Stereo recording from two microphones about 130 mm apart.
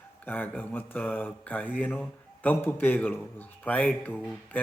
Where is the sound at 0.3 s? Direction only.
15° left (ahead or behind).